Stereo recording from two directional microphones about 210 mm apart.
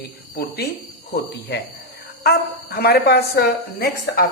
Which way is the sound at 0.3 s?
50° left (ahead or behind).